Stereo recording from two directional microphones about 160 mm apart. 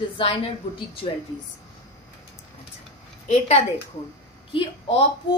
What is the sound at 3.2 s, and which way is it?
A woman's voice, 40° left (ahead or behind).